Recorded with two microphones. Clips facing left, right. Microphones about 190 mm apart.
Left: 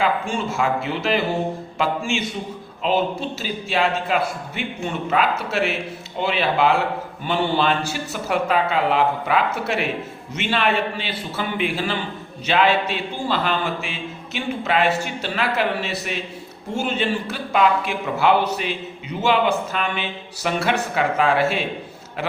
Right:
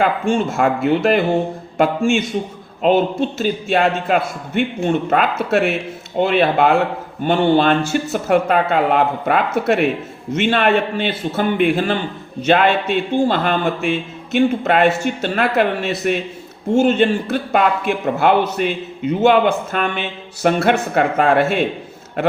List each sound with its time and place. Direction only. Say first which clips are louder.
0.0 s a man's voice: right 5 dB; 50° right (ahead or behind)
3.3 s a man's voice: right 7 dB; 50° right (ahead or behind)